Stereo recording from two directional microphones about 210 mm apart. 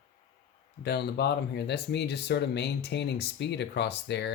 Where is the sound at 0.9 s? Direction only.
50° left (ahead or behind).